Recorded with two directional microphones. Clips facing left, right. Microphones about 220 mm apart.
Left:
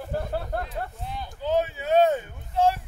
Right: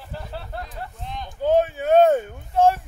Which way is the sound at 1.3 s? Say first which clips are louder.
Right 6 dB; 50° right (ahead or behind).